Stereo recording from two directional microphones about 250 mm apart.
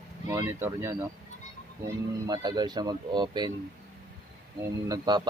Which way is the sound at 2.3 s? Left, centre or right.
Centre.